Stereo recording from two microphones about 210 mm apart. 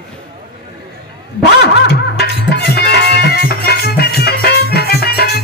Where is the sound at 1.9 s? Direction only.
50° left (ahead or behind).